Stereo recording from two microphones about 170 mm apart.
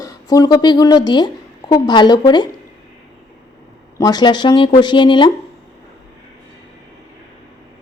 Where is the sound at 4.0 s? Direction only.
25° left (ahead or behind).